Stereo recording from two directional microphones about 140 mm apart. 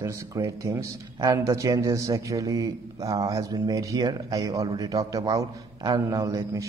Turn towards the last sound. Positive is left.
turn(degrees=-25)  # may be behind; listen again after turning